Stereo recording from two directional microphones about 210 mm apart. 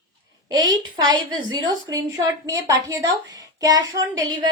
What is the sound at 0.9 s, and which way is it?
A woman's voice, 20° right (ahead or behind).